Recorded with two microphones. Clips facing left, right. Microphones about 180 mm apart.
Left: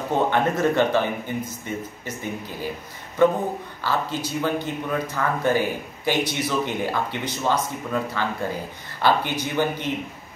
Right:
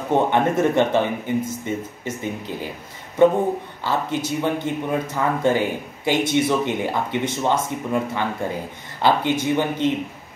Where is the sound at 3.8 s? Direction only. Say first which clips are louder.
Right 2 dB; 20° right (ahead or behind).